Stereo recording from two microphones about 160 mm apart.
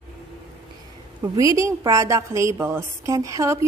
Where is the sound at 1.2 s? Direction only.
20° right (ahead or behind).